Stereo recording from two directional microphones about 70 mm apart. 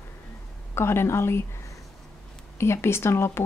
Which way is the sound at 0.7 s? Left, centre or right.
Left.